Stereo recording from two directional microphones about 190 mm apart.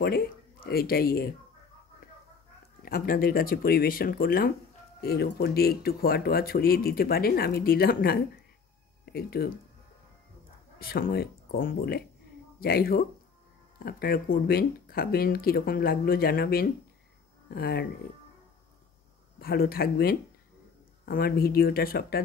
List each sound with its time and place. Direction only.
0.0 s speech: 55° left (ahead or behind)
2.8 s speech: 50° left (ahead or behind)
10.8 s speech: 50° left (ahead or behind)
19.4 s speech: 55° left (ahead or behind)